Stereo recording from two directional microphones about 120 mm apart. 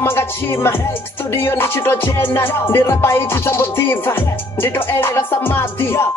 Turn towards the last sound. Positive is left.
turn(degrees=20)  # may be behind; listen again after turning